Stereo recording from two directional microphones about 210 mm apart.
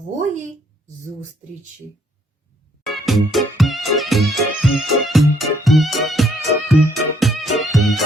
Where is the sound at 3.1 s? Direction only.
Centre (ahead or behind).